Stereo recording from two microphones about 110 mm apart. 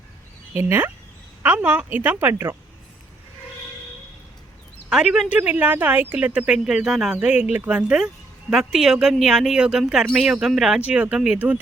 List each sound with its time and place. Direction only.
0.5 s speech: 20° right (ahead or behind)
4.9 s speech: 5° right (ahead or behind)
5.4 s speech: 15° right (ahead or behind)